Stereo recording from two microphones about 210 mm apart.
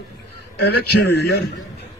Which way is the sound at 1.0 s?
50° left (ahead or behind).